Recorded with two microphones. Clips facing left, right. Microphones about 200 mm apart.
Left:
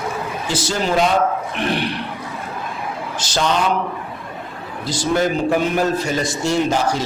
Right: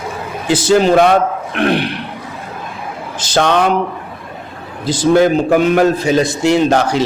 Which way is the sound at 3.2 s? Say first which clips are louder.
Right 6 dB; 60° right (ahead or behind).